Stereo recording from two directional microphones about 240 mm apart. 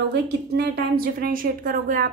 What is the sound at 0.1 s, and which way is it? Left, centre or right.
A woman's voice, right.